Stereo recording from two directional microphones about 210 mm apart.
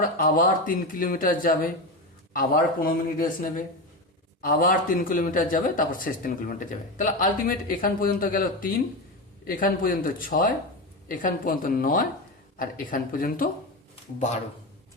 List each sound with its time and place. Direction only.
0.0 s speech: 40° left (ahead or behind)